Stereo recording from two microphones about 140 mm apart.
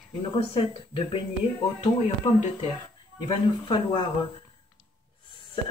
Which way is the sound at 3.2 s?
35° left (ahead or behind).